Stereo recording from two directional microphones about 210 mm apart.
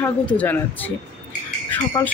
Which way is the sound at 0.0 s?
5° left (ahead or behind).